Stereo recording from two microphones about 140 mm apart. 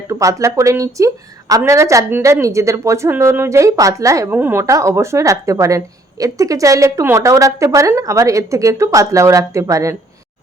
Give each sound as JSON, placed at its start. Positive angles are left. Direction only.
{"t": 0.1, "sound": "a woman's voice", "side_deg": -25}